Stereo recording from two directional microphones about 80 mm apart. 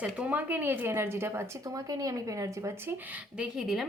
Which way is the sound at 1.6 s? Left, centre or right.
Right.